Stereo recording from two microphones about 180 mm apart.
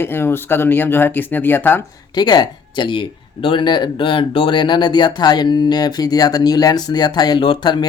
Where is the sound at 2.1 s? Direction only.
20° left (ahead or behind).